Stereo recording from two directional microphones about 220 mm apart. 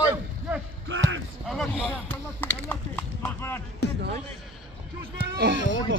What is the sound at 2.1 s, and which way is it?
Speech, 10° left (ahead or behind).